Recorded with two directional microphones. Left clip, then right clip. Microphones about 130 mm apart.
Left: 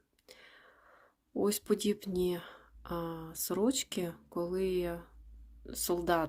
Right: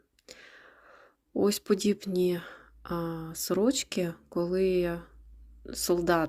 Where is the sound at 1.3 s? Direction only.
20° right (ahead or behind).